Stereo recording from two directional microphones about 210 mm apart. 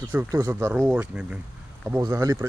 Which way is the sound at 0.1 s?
10° right (ahead or behind).